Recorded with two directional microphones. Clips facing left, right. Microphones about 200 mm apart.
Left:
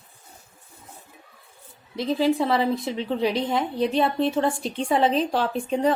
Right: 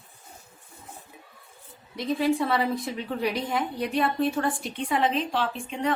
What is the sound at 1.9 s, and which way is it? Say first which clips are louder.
A woman's voice: left 3 dB; 30° left (ahead or behind).